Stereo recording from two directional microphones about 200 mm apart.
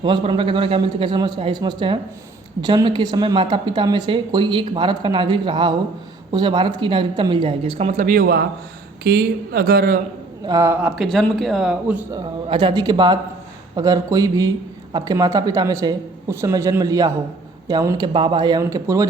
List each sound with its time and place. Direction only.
0.0 s a woman's voice: 25° right (ahead or behind)
8.0 s speech: 45° right (ahead or behind)
10.4 s a woman's voice: 15° right (ahead or behind)
10.9 s speech: centre (ahead or behind)
12.1 s a woman's voice: 25° right (ahead or behind)